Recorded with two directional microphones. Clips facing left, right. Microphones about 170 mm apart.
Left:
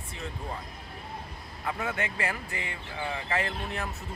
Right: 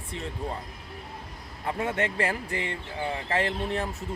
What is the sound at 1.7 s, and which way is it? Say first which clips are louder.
Speech: right 4 dB; 30° right (ahead or behind).